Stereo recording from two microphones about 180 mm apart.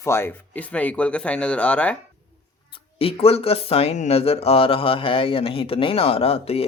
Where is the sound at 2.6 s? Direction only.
30° left (ahead or behind).